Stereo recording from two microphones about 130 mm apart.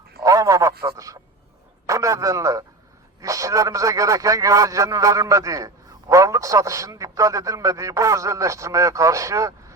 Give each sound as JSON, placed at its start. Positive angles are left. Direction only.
{"t": 0.2, "sound": "a man's voice", "side_deg": -25}